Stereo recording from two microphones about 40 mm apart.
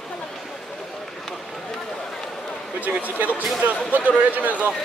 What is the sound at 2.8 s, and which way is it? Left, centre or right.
A man's voice, right.